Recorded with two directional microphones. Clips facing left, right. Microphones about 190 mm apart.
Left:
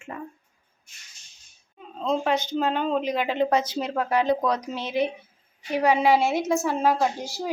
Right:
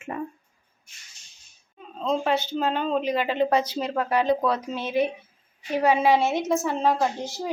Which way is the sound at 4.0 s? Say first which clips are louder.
Even; 10° left (ahead or behind).